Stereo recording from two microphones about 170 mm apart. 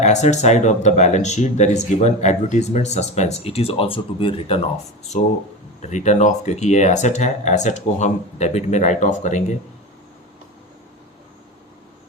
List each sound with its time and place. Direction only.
0.0 s speech: 40° left (ahead or behind)